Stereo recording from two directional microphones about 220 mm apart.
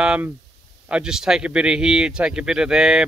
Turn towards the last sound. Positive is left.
turn(degrees=0)  # may be behind; listen again after turning